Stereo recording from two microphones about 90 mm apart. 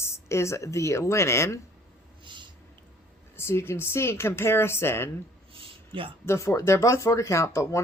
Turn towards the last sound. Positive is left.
turn(degrees=35)  # may be behind; listen again after turning